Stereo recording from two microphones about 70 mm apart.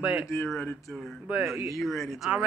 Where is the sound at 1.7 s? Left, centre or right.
Centre.